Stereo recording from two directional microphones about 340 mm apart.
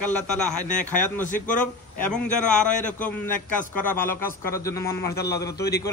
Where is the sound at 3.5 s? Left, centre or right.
Centre.